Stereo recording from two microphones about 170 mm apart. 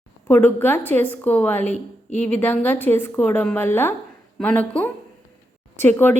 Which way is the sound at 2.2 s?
10° left (ahead or behind).